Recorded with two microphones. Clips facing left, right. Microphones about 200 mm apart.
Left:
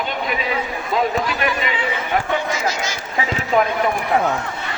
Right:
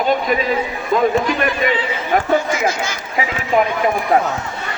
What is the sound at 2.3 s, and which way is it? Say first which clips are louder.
Run: right 5 dB; 50° right (ahead or behind).